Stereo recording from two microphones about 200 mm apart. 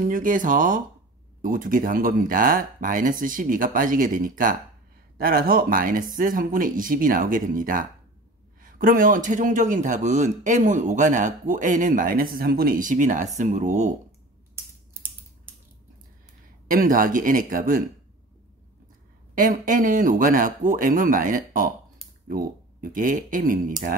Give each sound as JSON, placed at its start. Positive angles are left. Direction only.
{"t": 0.0, "sound": "a man's voice", "side_deg": -40}
{"t": 14.5, "sound": "a sound", "side_deg": -10}
{"t": 16.6, "sound": "speech", "side_deg": -45}
{"t": 19.3, "sound": "speech", "side_deg": -45}